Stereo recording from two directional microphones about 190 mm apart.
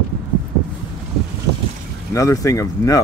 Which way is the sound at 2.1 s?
15° left (ahead or behind).